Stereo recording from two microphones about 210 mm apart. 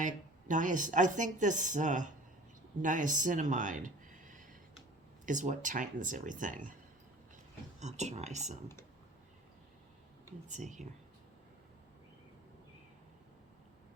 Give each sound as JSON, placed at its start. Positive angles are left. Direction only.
{"t": 0.0, "sound": "speech", "side_deg": -40}
{"t": 7.8, "sound": "speech", "side_deg": -35}
{"t": 10.5, "sound": "speech", "side_deg": -35}